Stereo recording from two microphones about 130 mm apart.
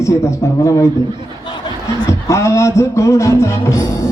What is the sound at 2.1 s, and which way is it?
Music, 20° left (ahead or behind).